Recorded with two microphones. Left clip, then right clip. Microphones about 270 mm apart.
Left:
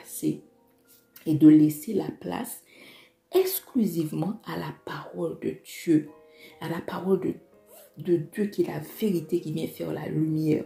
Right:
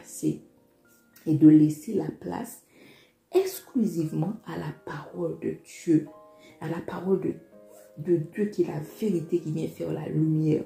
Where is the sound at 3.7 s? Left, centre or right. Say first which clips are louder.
Right 1 dB; left.